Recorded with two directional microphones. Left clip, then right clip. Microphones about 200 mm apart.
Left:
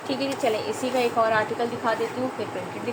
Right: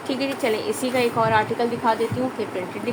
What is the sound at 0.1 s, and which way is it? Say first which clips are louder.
A woman's voice: right 1 dB; 35° right (ahead or behind).